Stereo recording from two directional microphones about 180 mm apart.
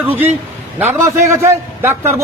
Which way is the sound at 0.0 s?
10° right (ahead or behind).